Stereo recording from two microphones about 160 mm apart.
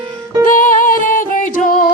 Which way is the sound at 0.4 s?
55° left (ahead or behind).